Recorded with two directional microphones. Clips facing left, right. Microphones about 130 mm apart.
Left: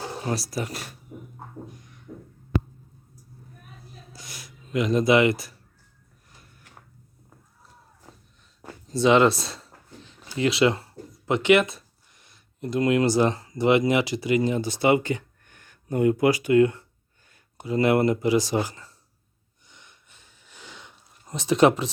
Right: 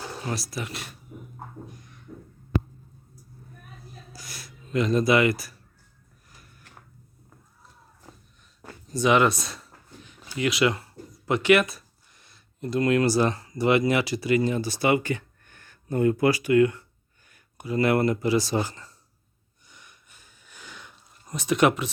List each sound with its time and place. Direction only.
0.0 s speech: 25° left (ahead or behind)
2.1 s heart sounds: 45° left (ahead or behind)
4.1 s a sound: 20° left (ahead or behind)
8.6 s speech: 25° left (ahead or behind); by 18.9 s 10° left (ahead or behind)
19.6 s sniff: 20° left (ahead or behind)